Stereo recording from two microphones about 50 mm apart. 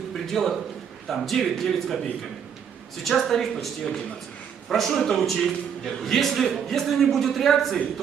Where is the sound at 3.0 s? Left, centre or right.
Centre.